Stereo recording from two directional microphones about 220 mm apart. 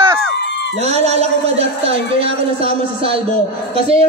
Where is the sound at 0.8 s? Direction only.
30° right (ahead or behind).